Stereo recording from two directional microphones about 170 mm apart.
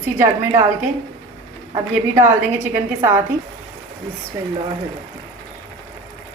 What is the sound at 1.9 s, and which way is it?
A woman's voice, 15° right (ahead or behind).